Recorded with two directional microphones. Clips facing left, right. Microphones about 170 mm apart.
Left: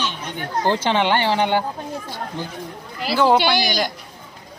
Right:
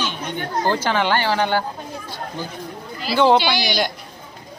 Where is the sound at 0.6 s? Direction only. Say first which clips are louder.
Left 2 dB; 25° left (ahead or behind).